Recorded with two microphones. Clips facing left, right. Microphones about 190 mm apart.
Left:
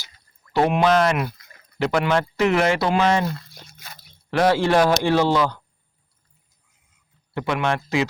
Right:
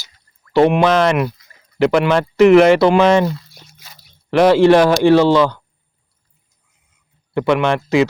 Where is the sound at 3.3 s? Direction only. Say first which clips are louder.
Right 2 dB; 55° left (ahead or behind).